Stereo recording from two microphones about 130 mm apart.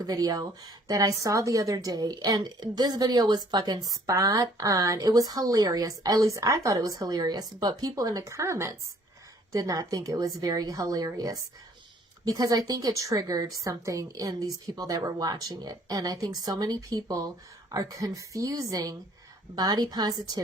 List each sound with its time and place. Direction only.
0.0 s a woman's voice: 30° right (ahead or behind)